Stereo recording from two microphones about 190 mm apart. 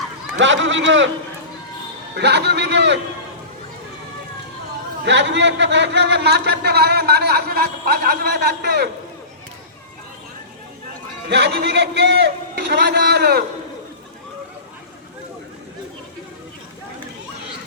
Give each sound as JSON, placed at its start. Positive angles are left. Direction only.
{"t": 0.3, "sound": "speech", "side_deg": -75}
{"t": 2.1, "sound": "a man's voice", "side_deg": -60}
{"t": 5.0, "sound": "a man's voice", "side_deg": -65}
{"t": 11.3, "sound": "a man's voice", "side_deg": -65}